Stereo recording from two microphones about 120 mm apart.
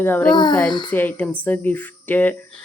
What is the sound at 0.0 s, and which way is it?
Speech, 15° left (ahead or behind).